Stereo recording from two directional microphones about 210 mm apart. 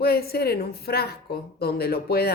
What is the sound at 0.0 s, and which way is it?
Speech, 45° left (ahead or behind).